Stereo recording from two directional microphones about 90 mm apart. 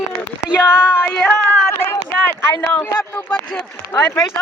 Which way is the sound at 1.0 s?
10° left (ahead or behind).